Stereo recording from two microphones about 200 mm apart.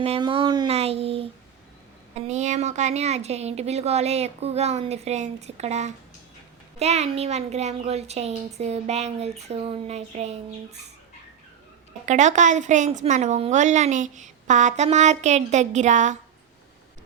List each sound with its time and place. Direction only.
0.0 s a sound: 25° right (ahead or behind)
2.1 s a woman's voice: 35° right (ahead or behind)
12.0 s a woman's voice: 35° right (ahead or behind)